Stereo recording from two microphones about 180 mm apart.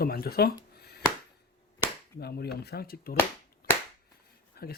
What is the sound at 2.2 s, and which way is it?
Speech, 65° left (ahead or behind).